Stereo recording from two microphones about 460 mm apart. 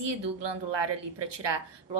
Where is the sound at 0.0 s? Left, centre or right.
Right.